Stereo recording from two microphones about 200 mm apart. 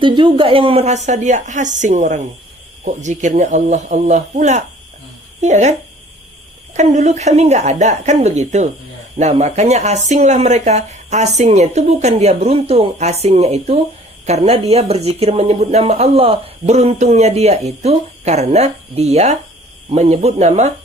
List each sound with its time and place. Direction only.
0.0 s speech: 25° right (ahead or behind)
6.7 s speech: 35° right (ahead or behind)